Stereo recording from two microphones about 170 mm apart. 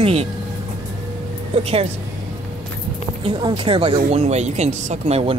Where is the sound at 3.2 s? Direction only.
30° right (ahead or behind).